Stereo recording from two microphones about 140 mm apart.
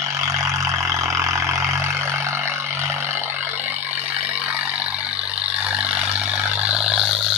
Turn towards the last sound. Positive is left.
turn(degrees=0)  # may be behind; listen again after turning